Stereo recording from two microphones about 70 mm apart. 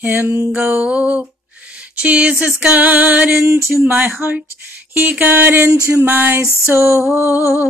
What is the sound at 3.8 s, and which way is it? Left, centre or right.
Music, right.